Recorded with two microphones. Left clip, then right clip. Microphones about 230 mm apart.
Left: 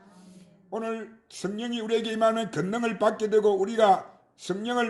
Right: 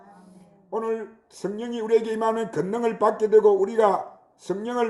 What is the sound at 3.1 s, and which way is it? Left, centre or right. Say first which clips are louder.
Speech: right 5 dB; left.